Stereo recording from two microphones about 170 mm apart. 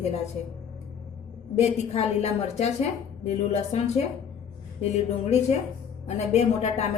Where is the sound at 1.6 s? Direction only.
40° left (ahead or behind).